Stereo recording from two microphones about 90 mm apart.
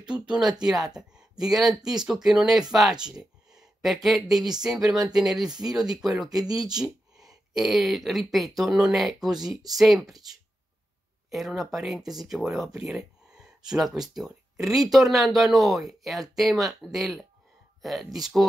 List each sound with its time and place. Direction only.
0.1 s speech: 10° right (ahead or behind)
6.3 s speech: 45° right (ahead or behind)
6.7 s a sound: 10° right (ahead or behind)
7.5 s speech: centre (ahead or behind)
11.2 s speech: centre (ahead or behind)